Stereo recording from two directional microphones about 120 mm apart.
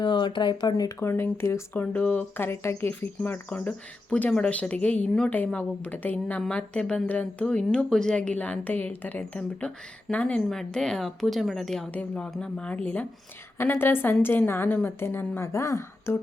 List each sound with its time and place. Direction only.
0.0 s speech: 40° left (ahead or behind)
0.7 s speech: 30° left (ahead or behind)